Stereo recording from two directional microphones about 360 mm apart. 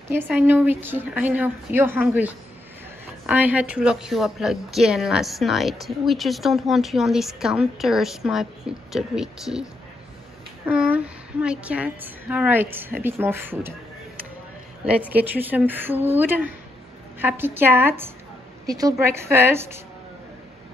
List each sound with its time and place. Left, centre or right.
0.1 s a woman's voice: centre
15.0 s a woman's voice: centre